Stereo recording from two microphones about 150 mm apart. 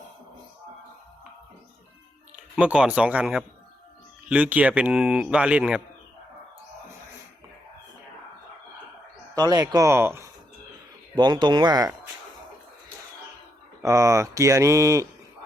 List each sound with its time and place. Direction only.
2.3 s speech: 10° right (ahead or behind)
9.3 s speech: 25° right (ahead or behind)
11.1 s speech: 30° right (ahead or behind)
13.8 s speech: 20° right (ahead or behind)